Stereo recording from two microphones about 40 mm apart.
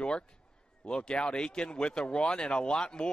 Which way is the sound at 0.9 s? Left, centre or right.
Left.